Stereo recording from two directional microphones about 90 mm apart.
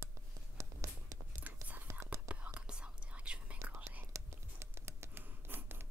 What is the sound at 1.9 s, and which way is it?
Whispering, 30° right (ahead or behind).